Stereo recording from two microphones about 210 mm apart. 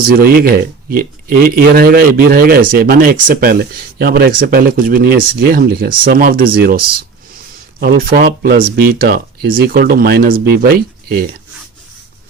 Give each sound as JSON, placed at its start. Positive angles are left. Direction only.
{"t": 0.1, "sound": "speech", "side_deg": -45}